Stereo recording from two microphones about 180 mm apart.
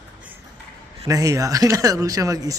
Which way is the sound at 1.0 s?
20° right (ahead or behind).